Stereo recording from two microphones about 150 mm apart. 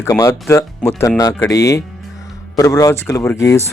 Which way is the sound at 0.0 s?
25° left (ahead or behind).